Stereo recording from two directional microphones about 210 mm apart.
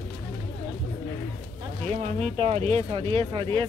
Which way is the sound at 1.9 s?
30° right (ahead or behind).